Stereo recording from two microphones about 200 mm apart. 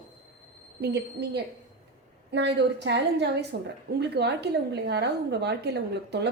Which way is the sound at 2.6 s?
60° right (ahead or behind).